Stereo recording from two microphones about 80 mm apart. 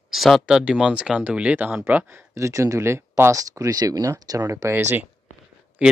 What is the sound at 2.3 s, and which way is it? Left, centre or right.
Speech, right.